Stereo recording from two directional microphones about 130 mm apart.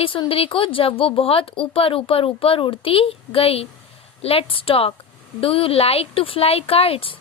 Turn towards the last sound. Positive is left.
turn(degrees=45)  # may be behind; listen again after turning